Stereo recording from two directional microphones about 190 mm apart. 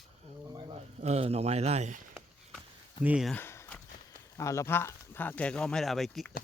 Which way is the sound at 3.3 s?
10° left (ahead or behind).